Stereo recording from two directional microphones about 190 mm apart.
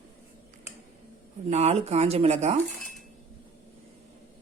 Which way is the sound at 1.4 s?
35° right (ahead or behind).